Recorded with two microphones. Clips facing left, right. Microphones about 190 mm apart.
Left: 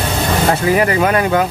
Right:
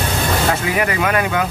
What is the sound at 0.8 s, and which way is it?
Speech, 35° left (ahead or behind).